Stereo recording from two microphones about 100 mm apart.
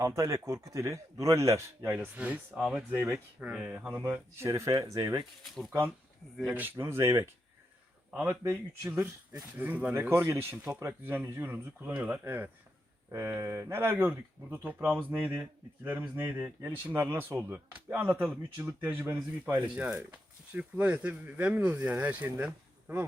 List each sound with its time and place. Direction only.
0.0 s a man's voice: 30° right (ahead or behind)
2.1 s speech: 15° right (ahead or behind)
3.0 s speech: 25° right (ahead or behind)
3.5 s speech: 10° right (ahead or behind); by 5.2 s 40° right (ahead or behind)
6.4 s speech: 15° right (ahead or behind)
8.1 s speech: 15° right (ahead or behind)